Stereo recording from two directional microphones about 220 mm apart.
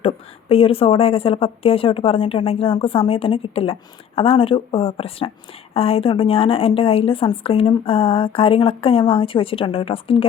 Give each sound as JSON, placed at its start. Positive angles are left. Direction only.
{"t": 0.0, "sound": "speech", "side_deg": 25}